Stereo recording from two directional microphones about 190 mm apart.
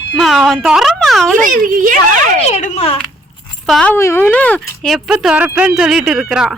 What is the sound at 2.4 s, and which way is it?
Speech, 35° left (ahead or behind).